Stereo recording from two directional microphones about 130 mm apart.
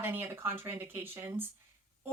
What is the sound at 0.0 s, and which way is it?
A woman's voice, 15° right (ahead or behind).